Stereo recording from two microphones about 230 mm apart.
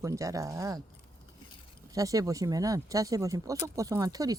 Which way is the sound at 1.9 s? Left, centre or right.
Centre.